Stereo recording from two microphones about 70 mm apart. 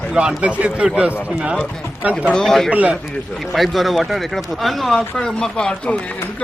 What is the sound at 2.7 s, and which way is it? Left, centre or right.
Speech, centre.